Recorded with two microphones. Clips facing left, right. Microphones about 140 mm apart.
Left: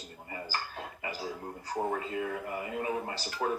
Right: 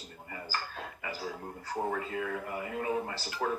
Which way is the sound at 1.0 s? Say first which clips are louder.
Left 1 dB; 15° left (ahead or behind).